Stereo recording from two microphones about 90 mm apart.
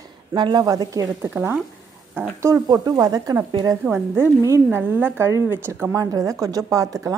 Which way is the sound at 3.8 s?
25° right (ahead or behind).